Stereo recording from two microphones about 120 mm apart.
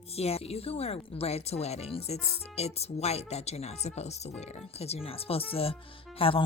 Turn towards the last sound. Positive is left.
turn(degrees=50)  # may be behind; listen again after turning